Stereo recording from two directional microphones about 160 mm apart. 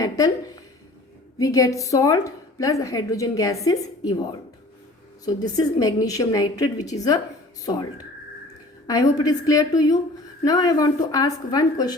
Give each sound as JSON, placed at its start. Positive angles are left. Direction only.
{"t": 0.0, "sound": "a woman's voice", "side_deg": 20}
{"t": 8.9, "sound": "a woman's voice", "side_deg": 20}